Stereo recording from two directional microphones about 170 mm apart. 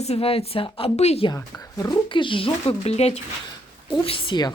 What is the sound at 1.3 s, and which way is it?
A woman's voice, 20° left (ahead or behind).